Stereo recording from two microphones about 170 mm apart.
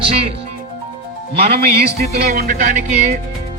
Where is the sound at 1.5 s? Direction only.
65° right (ahead or behind).